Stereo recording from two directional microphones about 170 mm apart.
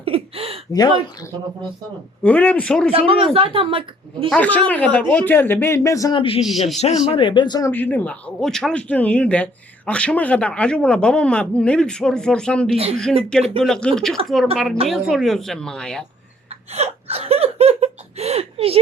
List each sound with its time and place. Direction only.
0.0 s a sound: 35° right (ahead or behind)
2.2 s speech: 10° left (ahead or behind)
2.9 s speech: 35° right (ahead or behind)
4.3 s speech: 10° left (ahead or behind)
6.1 s a man's voice: 30° left (ahead or behind)
6.4 s speech: centre (ahead or behind)
7.1 s speech: 30° left (ahead or behind)
7.7 s speech: 10° left (ahead or behind)
12.7 s speech: 35° right (ahead or behind)
13.6 s speech: 5° left (ahead or behind)
16.7 s a sound: 40° right (ahead or behind)